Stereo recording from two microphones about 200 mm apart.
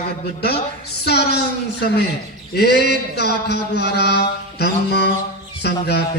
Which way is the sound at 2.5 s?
55° left (ahead or behind).